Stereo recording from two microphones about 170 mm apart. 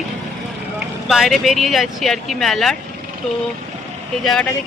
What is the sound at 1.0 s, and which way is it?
Speech, centre (ahead or behind).